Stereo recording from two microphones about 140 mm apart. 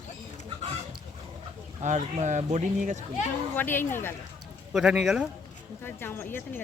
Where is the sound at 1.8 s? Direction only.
60° right (ahead or behind).